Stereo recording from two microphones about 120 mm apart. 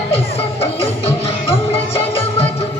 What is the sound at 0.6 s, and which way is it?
Music, 55° left (ahead or behind).